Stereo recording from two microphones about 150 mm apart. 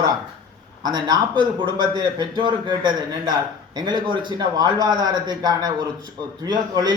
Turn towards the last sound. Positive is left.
turn(degrees=-25)  # may be behind; listen again after turning